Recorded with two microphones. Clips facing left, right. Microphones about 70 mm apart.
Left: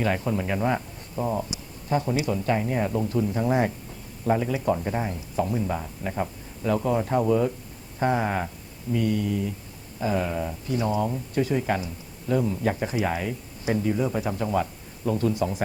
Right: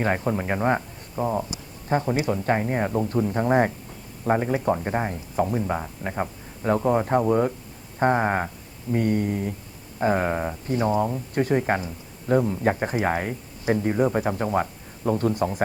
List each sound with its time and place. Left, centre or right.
0.0 s speech: right
1.1 s speech: right